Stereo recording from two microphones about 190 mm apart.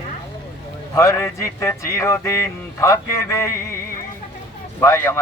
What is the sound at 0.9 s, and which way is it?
A man's voice, 15° left (ahead or behind).